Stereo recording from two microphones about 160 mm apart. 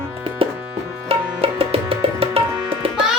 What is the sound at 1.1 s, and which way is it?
Tabla, 35° right (ahead or behind).